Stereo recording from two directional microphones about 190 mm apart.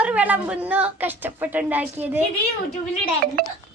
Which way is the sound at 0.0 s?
10° right (ahead or behind).